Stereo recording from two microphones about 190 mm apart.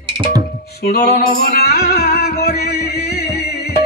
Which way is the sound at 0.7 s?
55° left (ahead or behind).